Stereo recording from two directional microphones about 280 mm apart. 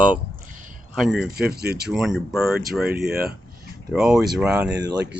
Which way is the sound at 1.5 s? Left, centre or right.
Right.